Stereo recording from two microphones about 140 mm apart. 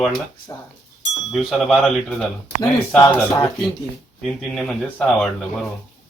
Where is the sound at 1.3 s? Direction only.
Centre (ahead or behind).